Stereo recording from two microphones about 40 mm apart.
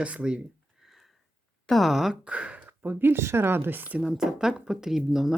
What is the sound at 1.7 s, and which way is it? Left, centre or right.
Speech, centre.